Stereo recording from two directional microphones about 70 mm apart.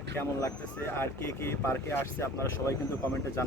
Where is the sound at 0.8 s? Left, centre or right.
Left.